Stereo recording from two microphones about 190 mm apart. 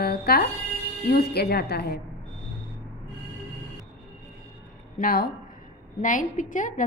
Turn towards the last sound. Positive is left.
turn(degrees=40)  # may be behind; listen again after turning